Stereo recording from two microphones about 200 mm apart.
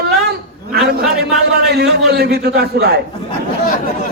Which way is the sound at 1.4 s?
55° right (ahead or behind).